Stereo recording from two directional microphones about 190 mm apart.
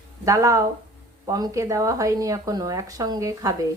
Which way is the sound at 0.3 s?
15° right (ahead or behind).